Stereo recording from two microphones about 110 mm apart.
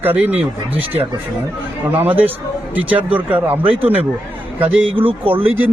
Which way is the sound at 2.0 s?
15° right (ahead or behind).